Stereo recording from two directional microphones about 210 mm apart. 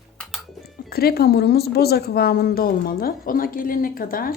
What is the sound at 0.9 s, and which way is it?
Speech, 45° left (ahead or behind).